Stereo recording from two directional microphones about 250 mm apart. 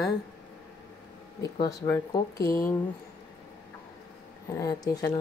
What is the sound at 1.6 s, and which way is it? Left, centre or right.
Speech, centre.